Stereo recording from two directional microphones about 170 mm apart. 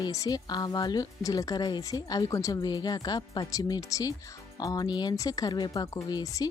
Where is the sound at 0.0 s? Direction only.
20° left (ahead or behind).